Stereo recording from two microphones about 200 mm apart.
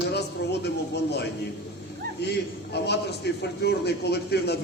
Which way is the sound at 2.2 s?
55° left (ahead or behind).